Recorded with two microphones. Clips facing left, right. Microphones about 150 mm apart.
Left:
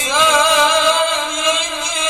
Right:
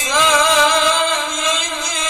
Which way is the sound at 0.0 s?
20° left (ahead or behind).